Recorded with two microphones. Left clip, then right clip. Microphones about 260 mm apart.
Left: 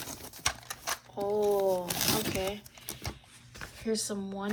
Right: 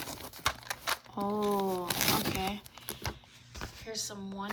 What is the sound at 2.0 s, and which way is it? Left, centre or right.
Zipper, right.